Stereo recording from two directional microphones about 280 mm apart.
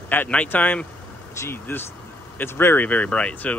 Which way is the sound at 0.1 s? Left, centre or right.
Centre.